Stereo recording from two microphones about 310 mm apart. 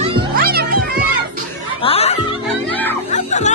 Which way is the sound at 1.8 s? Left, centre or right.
Centre.